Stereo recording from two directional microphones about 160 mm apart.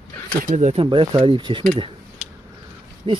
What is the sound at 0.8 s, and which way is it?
Speech, 30° right (ahead or behind).